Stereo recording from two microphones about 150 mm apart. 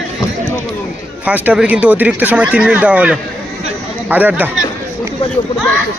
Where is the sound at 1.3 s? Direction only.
10° right (ahead or behind).